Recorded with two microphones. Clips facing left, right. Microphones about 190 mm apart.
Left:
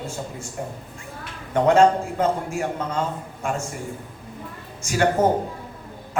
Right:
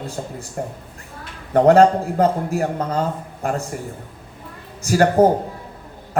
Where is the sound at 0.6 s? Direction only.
50° right (ahead or behind).